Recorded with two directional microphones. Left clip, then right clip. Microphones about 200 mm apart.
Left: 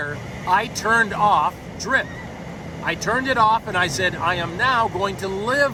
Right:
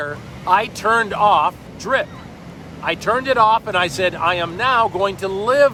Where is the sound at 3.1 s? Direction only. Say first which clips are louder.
Right 3 dB; 20° right (ahead or behind).